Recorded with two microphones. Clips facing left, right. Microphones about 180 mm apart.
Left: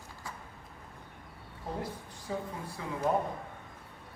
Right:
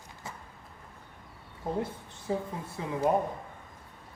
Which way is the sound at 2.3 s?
25° right (ahead or behind).